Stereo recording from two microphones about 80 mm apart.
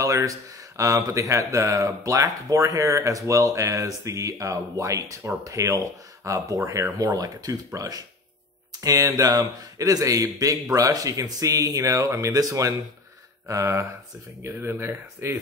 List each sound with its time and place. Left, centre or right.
0.0 s speech: right